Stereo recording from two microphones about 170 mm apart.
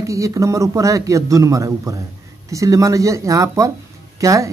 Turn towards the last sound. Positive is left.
turn(degrees=-20)  # may be behind; listen again after turning